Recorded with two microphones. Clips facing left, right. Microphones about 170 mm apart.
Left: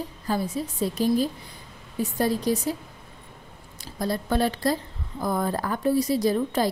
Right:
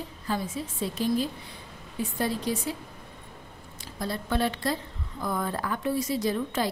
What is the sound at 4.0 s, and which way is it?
A woman's voice, 40° left (ahead or behind).